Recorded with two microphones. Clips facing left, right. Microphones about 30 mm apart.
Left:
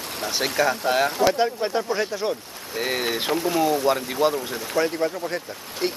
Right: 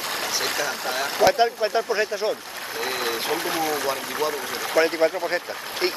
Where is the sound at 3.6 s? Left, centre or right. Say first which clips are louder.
Left 4 dB; right.